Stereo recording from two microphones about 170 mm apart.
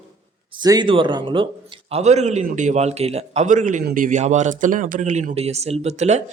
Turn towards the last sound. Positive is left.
turn(degrees=-40)  # may be behind; listen again after turning